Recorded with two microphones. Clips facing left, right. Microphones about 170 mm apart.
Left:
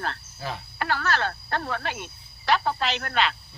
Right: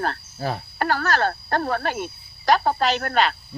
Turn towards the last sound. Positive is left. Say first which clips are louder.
# right 5 dB
turn(degrees=-45)  # may be behind; listen again after turning